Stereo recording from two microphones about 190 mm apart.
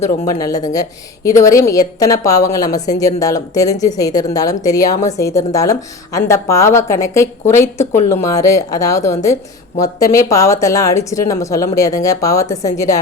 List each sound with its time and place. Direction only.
0.0 s a woman's voice: 20° left (ahead or behind)